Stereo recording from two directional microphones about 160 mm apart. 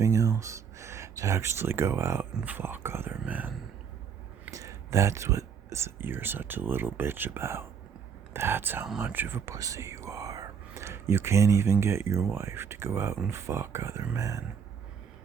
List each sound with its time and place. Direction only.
0.0 s a sound: 20° right (ahead or behind)
2.3 s speech: 10° right (ahead or behind)
4.5 s speech: 20° right (ahead or behind)